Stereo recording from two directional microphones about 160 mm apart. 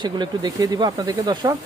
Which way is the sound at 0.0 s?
25° right (ahead or behind).